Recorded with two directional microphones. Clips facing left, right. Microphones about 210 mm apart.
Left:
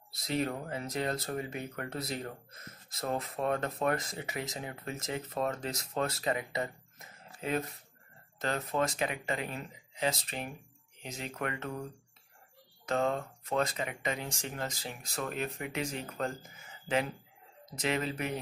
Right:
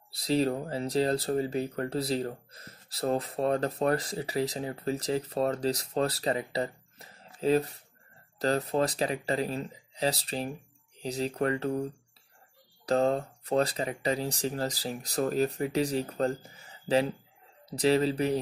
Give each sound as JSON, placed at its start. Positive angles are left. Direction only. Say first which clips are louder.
{"t": 0.1, "sound": "speech", "louder": "right 6 dB", "side_deg": -30}